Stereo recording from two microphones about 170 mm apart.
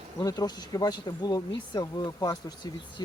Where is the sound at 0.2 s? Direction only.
20° left (ahead or behind).